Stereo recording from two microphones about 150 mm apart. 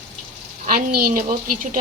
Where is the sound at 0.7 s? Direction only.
70° right (ahead or behind).